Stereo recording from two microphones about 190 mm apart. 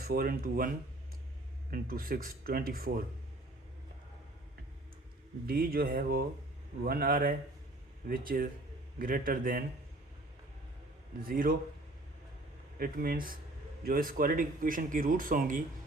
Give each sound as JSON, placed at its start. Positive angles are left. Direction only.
{"t": 0.0, "sound": "speech", "side_deg": -55}
{"t": 1.7, "sound": "speech", "side_deg": -50}
{"t": 5.5, "sound": "speech", "side_deg": -50}
{"t": 11.2, "sound": "speech", "side_deg": -50}
{"t": 12.8, "sound": "speech", "side_deg": -50}